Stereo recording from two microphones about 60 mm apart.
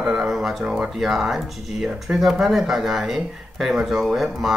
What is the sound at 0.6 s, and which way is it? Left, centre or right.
Speech, centre.